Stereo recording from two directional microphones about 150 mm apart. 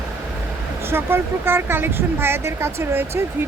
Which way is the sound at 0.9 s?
15° right (ahead or behind).